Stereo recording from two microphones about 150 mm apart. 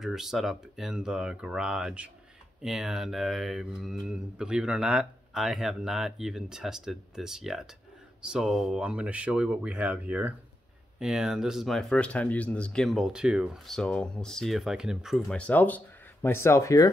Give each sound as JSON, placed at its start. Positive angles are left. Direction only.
{"t": 0.0, "sound": "speech", "side_deg": -5}